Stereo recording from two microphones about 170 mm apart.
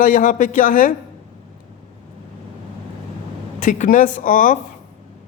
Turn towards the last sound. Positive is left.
turn(degrees=50)  # may be behind; listen again after turning